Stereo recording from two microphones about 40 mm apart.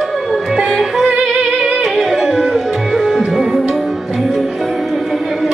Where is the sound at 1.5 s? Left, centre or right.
Centre.